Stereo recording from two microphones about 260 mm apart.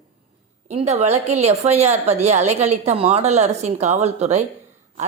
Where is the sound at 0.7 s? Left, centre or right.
Right.